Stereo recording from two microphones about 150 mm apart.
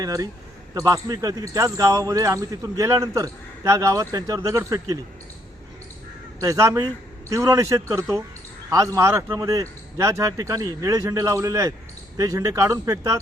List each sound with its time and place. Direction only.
0.0 s speech: 25° right (ahead or behind)
6.4 s speech: 20° right (ahead or behind)